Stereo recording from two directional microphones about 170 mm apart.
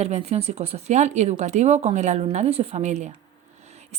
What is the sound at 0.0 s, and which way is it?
A woman's voice, 40° right (ahead or behind).